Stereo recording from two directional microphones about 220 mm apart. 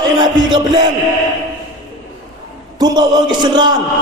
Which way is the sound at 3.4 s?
20° right (ahead or behind).